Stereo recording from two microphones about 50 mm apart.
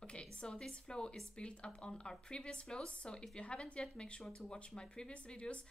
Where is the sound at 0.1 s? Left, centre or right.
Centre.